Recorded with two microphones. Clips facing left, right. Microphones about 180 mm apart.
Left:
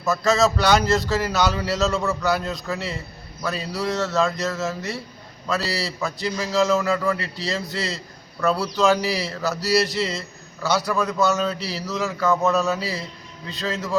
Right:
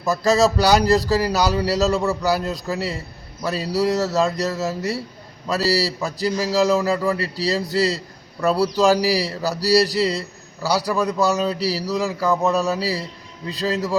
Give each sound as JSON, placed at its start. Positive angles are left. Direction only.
{"t": 0.1, "sound": "speech", "side_deg": -35}